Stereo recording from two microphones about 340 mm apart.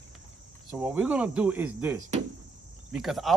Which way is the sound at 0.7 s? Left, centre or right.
Centre.